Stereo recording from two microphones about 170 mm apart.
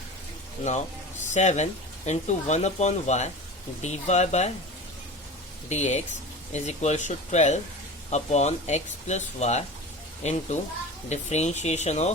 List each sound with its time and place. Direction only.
1.3 s speech: 45° left (ahead or behind)
5.6 s speech: 45° left (ahead or behind)